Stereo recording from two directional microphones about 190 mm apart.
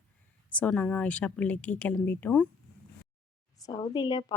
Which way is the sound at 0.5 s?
5° left (ahead or behind).